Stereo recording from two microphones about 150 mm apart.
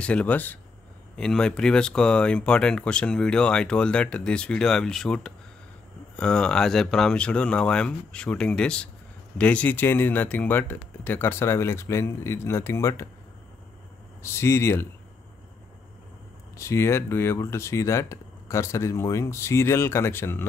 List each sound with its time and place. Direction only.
0.0 s speech: 10° left (ahead or behind)
14.2 s speech: 15° left (ahead or behind)
16.5 s speech: 20° left (ahead or behind)